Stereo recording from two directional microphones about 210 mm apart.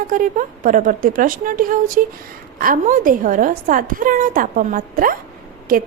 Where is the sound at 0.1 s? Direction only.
40° right (ahead or behind).